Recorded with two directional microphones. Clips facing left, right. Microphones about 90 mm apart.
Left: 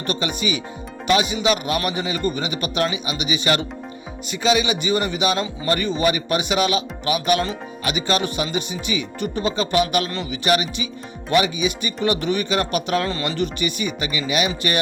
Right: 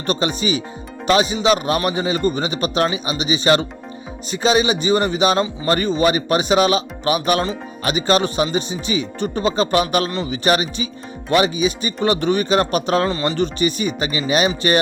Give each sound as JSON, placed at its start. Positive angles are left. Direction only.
{"t": 0.1, "sound": "speech", "side_deg": -35}
{"t": 13.1, "sound": "speech", "side_deg": -20}
{"t": 13.3, "sound": "speech", "side_deg": -35}